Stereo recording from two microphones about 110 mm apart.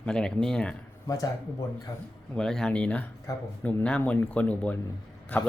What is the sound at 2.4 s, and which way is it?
Speech, 5° left (ahead or behind).